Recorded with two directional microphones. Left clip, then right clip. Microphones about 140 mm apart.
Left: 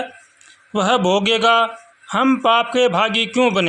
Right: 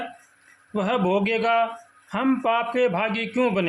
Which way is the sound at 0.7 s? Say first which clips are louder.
Left 7 dB; 30° left (ahead or behind).